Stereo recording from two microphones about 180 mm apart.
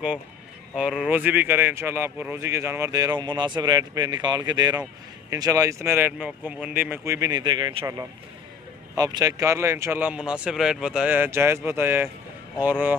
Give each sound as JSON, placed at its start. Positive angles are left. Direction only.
{"t": 0.7, "sound": "speech", "side_deg": -5}